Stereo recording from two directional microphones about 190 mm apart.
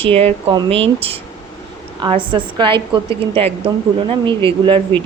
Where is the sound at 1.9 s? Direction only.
25° right (ahead or behind).